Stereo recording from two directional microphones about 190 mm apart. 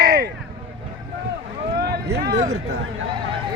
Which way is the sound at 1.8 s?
55° right (ahead or behind).